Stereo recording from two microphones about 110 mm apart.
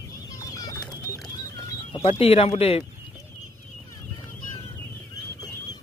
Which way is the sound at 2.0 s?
60° left (ahead or behind).